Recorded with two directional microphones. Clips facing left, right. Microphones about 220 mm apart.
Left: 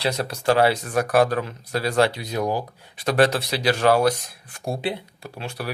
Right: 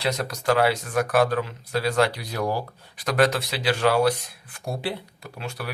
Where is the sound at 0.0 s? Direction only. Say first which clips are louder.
Left 2 dB; 30° left (ahead or behind).